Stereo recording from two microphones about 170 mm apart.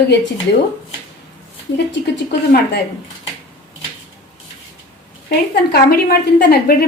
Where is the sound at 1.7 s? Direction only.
85° left.